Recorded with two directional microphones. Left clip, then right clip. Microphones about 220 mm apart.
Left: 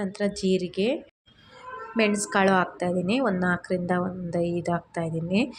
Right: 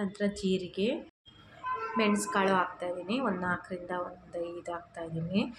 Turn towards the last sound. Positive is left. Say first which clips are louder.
# left 8 dB
turn(degrees=25)  # may be behind; listen again after turning